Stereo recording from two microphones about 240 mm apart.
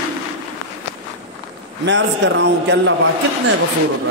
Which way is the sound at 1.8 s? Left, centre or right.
Right.